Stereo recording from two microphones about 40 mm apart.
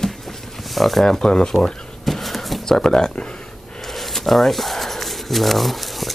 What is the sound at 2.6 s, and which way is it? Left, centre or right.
Speech, centre.